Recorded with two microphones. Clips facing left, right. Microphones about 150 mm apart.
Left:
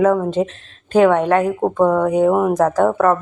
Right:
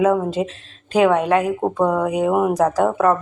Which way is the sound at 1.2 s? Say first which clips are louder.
Left 2 dB; 30° left (ahead or behind).